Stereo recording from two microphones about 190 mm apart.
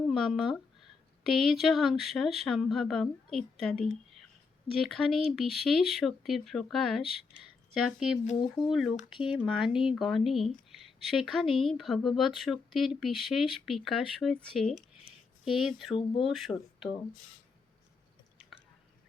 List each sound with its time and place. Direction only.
0.1 s speech: centre (ahead or behind)
8.6 s speech: 20° left (ahead or behind)
8.9 s speech: 30° left (ahead or behind)
9.2 s speech: centre (ahead or behind)